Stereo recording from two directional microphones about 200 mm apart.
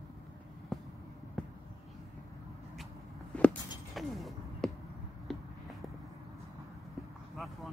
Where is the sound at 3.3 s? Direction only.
5° left (ahead or behind).